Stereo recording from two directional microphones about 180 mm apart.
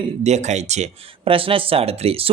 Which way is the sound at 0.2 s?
40° right (ahead or behind).